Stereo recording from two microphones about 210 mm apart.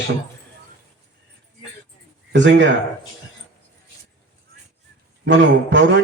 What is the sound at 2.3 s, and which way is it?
Speech, 60° right (ahead or behind).